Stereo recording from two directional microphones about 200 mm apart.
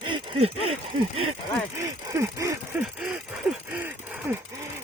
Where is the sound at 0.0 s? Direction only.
25° right (ahead or behind).